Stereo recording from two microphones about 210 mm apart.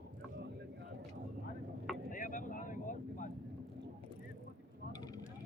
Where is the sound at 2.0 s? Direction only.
40° left (ahead or behind).